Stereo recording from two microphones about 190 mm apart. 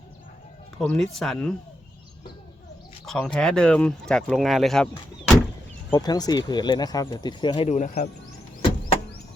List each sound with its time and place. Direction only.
0.9 s speech: centre (ahead or behind)
3.1 s speech: 5° left (ahead or behind)
5.9 s speech: 20° left (ahead or behind)